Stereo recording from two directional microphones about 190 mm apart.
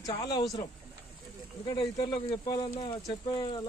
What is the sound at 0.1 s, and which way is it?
Speech, 20° left (ahead or behind).